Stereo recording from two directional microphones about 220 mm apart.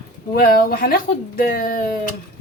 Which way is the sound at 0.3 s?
40° left (ahead or behind).